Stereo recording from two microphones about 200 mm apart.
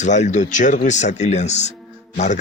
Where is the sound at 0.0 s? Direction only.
35° left (ahead or behind).